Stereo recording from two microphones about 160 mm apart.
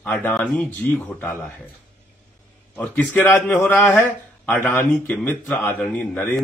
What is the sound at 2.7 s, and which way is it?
A man's voice, 10° left (ahead or behind).